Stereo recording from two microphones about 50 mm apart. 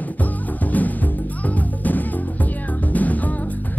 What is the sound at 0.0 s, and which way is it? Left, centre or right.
Music, left.